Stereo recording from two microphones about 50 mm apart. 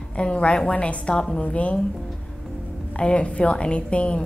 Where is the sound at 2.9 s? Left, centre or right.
Left.